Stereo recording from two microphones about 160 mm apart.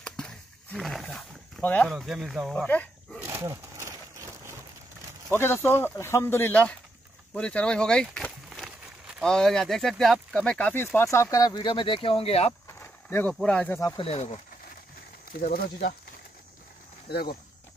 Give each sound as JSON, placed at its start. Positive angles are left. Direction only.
{"t": 0.7, "sound": "speech", "side_deg": 0}
{"t": 2.0, "sound": "speech", "side_deg": 0}
{"t": 2.5, "sound": "dog", "side_deg": 10}
{"t": 3.3, "sound": "wild animals", "side_deg": -20}
{"t": 5.3, "sound": "speech", "side_deg": 15}
{"t": 12.6, "sound": "a sound", "side_deg": 15}
{"t": 13.9, "sound": "speech", "side_deg": 40}
{"t": 15.3, "sound": "speech", "side_deg": 70}
{"t": 17.1, "sound": "speech", "side_deg": 75}